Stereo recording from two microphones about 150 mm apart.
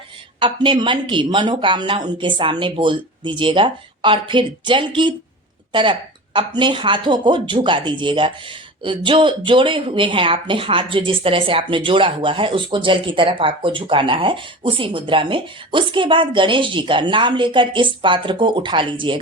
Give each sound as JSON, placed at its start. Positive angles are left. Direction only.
{"t": 0.3, "sound": "speech", "side_deg": -30}